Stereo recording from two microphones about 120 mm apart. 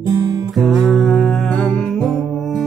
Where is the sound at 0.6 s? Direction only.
Centre (ahead or behind).